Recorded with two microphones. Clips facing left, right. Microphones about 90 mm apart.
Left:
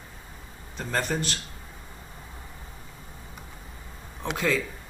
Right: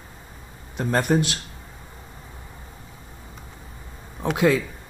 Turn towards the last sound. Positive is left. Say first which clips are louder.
# right 7 dB
turn(degrees=-10)  # may be behind; listen again after turning